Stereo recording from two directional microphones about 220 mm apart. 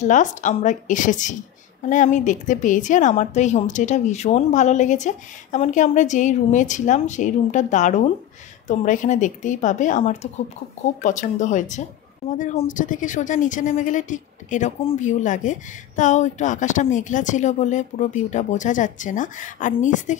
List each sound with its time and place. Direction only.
0.0 s a woman's voice: 35° left (ahead or behind)